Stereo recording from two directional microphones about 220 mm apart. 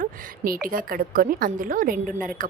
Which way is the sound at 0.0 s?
40° right (ahead or behind).